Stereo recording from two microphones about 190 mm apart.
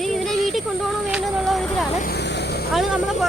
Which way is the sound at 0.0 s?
Centre (ahead or behind).